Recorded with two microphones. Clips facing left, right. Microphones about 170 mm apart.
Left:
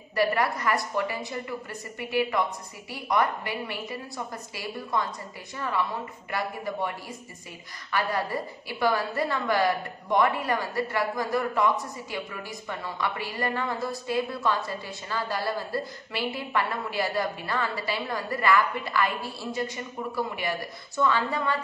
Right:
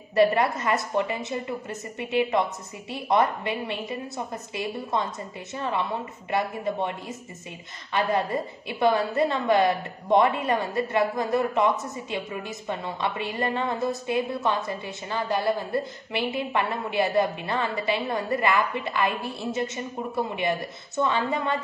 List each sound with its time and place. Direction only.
0.1 s a woman's voice: 25° right (ahead or behind)